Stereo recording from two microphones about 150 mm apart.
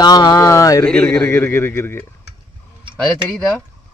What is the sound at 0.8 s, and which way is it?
A man's voice, 5° left (ahead or behind).